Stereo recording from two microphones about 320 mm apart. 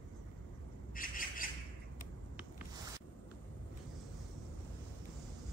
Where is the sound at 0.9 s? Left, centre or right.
Left.